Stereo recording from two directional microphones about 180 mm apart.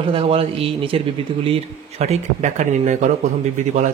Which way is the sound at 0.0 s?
30° right (ahead or behind).